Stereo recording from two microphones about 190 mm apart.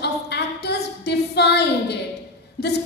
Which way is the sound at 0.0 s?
60° left (ahead or behind).